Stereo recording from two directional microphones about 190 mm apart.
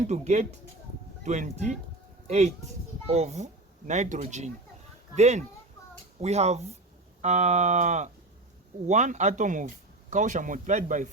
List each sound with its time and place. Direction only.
0.0 s speech: 35° right (ahead or behind)